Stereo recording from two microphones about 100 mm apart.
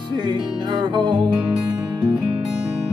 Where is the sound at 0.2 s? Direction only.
50° right (ahead or behind).